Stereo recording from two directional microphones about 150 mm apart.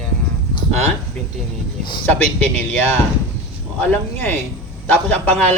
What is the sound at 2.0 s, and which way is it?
A man's voice, 10° left (ahead or behind).